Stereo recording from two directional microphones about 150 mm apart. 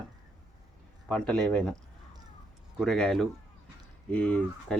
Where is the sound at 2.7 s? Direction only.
Centre (ahead or behind).